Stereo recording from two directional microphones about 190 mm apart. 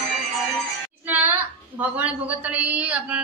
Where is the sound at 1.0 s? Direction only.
10° right (ahead or behind).